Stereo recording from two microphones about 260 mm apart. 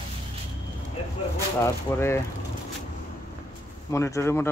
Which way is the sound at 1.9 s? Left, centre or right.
Centre.